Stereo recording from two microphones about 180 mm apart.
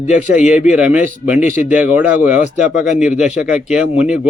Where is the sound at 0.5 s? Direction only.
5° right (ahead or behind).